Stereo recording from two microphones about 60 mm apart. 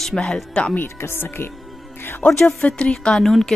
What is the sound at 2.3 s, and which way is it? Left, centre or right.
Speech, centre.